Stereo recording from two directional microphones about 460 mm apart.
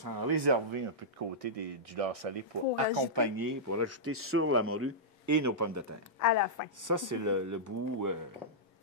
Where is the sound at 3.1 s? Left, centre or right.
Right.